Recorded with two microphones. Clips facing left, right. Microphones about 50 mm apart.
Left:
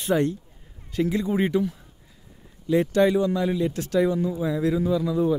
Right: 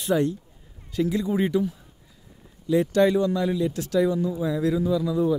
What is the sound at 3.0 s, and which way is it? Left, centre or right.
Speech, centre.